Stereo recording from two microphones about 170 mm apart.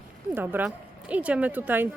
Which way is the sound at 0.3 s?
10° right (ahead or behind).